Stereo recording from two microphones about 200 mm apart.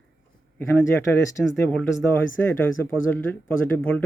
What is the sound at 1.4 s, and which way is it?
Speech, 5° left (ahead or behind).